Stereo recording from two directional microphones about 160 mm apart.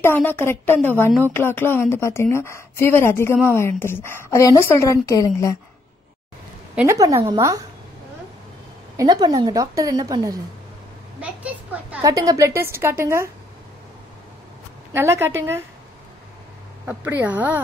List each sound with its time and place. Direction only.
0.0 s a woman's voice: 15° left (ahead or behind)
6.7 s a sound: 5° right (ahead or behind)
7.0 s a woman's voice: 20° right (ahead or behind)
8.9 s a woman's voice: 25° right (ahead or behind)
11.1 s a sound: 10° right (ahead or behind)
12.0 s a woman's voice: 20° right (ahead or behind)
14.9 s a woman's voice: 15° right (ahead or behind)
16.8 s a woman's voice: 10° right (ahead or behind)